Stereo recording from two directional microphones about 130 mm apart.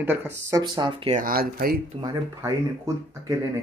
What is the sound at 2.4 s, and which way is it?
Speech, 25° right (ahead or behind).